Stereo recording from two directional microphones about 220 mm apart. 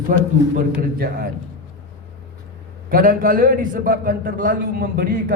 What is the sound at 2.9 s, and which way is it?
A man's voice, 40° right (ahead or behind).